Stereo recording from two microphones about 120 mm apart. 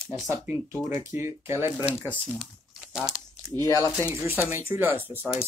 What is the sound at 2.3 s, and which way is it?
Crumpling, centre (ahead or behind).